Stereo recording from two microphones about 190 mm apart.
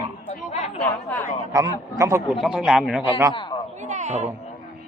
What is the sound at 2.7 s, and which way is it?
Speech, centre (ahead or behind).